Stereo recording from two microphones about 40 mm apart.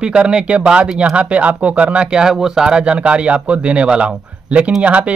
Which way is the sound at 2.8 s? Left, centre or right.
Right.